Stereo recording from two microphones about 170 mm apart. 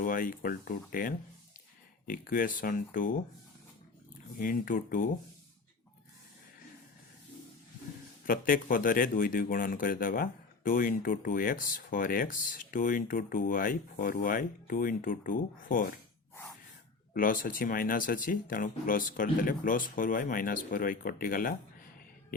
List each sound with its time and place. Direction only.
0.0 s speech: 55° left (ahead or behind)
4.4 s speech: 55° left (ahead or behind)
8.3 s speech: 55° left (ahead or behind)
17.2 s speech: 55° left (ahead or behind)